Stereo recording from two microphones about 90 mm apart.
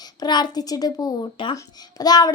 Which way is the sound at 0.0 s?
50° left (ahead or behind).